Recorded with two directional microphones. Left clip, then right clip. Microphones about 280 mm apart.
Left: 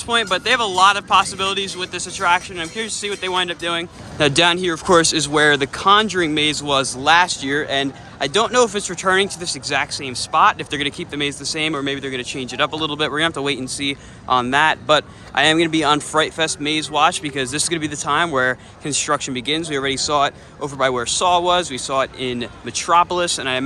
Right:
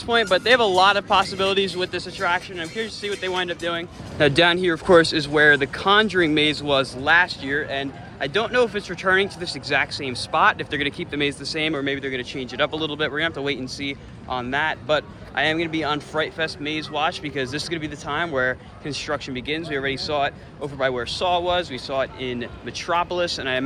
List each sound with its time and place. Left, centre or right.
0.1 s speech: centre